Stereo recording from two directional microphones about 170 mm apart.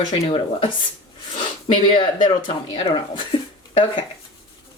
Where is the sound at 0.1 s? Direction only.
30° left (ahead or behind).